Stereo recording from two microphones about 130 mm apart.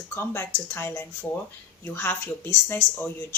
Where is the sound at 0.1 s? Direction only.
20° left (ahead or behind).